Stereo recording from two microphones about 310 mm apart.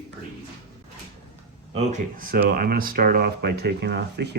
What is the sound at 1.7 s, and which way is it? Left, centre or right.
Speech, right.